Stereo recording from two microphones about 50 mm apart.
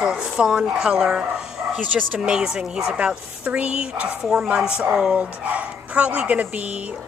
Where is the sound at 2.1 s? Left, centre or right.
Centre.